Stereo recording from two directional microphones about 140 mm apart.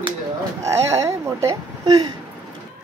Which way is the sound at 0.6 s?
20° right (ahead or behind).